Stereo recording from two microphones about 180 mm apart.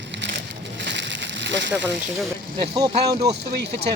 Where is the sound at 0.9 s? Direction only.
75° right (ahead or behind).